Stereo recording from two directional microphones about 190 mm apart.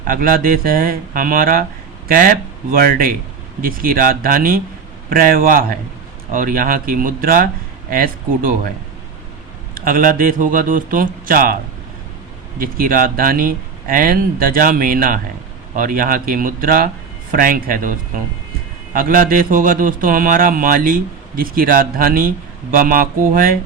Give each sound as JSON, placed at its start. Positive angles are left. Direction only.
{"t": 0.0, "sound": "a man's voice", "side_deg": -50}
{"t": 9.7, "sound": "a man's voice", "side_deg": -50}
{"t": 12.5, "sound": "a man's voice", "side_deg": -50}